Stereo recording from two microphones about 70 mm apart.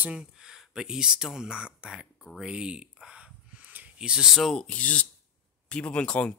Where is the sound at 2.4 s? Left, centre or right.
Centre.